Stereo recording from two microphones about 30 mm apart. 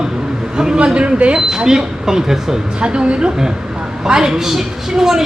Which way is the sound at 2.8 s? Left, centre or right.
Right.